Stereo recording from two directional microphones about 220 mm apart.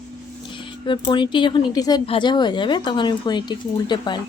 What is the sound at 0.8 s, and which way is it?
Speech, 20° left (ahead or behind).